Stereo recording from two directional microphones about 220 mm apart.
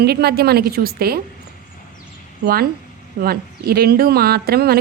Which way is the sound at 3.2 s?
45° right (ahead or behind).